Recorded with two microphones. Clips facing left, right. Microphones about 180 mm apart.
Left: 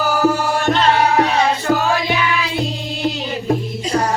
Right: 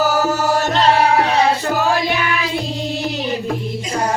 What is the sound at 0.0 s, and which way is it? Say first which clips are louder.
Music: even; 40° right (ahead or behind).